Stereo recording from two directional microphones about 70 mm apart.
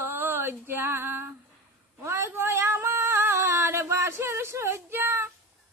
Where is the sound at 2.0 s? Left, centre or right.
Right.